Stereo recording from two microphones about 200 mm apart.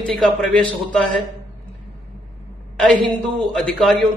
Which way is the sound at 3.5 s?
Centre (ahead or behind).